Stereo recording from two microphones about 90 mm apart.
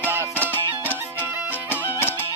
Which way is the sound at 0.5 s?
25° left (ahead or behind).